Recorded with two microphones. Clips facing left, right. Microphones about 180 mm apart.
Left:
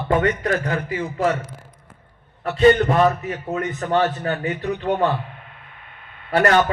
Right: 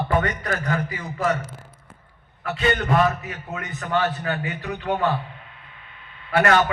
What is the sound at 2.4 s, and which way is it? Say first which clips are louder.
A man's voice: left 9 dB; 40° left (ahead or behind).